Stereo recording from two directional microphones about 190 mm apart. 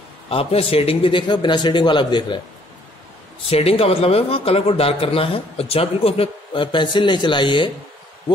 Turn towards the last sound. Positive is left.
turn(degrees=25)  # may be behind; listen again after turning